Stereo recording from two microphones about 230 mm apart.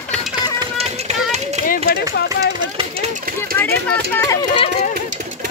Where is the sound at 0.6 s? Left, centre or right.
Right.